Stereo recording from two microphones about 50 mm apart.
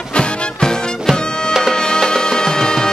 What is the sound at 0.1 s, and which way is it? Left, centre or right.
Music, left.